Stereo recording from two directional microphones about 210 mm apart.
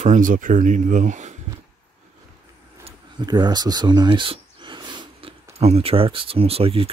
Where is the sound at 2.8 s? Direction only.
20° right (ahead or behind).